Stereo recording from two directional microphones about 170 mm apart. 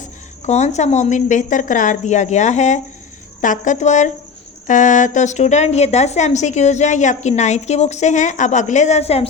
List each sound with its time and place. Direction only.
0.4 s a woman's voice: 40° left (ahead or behind)